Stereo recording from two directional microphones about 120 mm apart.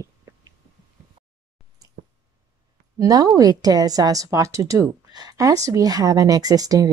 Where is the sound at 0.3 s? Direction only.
20° right (ahead or behind).